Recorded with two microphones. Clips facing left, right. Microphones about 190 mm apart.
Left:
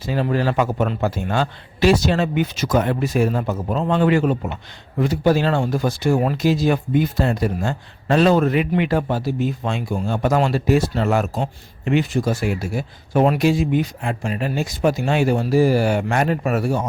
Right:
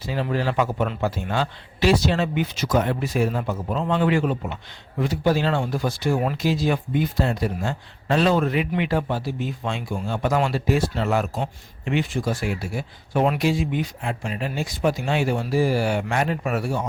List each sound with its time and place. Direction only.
0.0 s speech: 50° left (ahead or behind)